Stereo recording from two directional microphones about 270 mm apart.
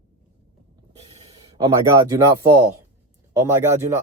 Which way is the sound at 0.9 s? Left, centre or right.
Right.